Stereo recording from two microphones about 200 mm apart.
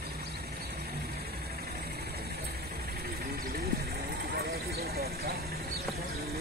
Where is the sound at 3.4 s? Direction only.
50° right (ahead or behind).